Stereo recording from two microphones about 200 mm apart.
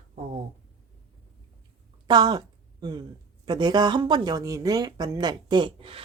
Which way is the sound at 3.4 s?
20° right (ahead or behind).